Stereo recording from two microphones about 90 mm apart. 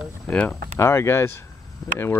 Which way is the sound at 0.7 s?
30° left (ahead or behind).